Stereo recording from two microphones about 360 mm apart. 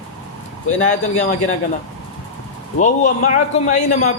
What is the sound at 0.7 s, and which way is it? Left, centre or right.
Speech, centre.